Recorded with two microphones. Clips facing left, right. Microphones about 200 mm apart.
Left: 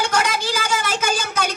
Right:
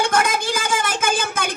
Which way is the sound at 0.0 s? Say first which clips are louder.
Right 2 dB; 50° right (ahead or behind).